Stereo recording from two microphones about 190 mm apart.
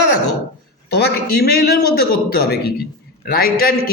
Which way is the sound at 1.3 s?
55° left (ahead or behind).